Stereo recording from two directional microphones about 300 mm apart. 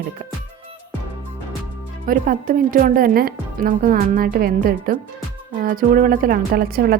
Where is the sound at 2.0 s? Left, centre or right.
Right.